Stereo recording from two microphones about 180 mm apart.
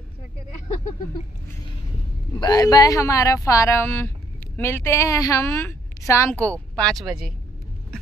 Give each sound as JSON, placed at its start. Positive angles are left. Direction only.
{"t": 2.4, "sound": "a woman's voice", "side_deg": 20}
{"t": 6.8, "sound": "speech", "side_deg": 0}